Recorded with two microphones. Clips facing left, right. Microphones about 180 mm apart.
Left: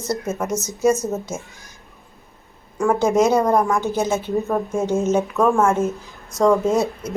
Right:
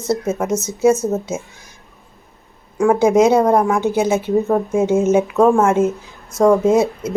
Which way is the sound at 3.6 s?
15° right (ahead or behind).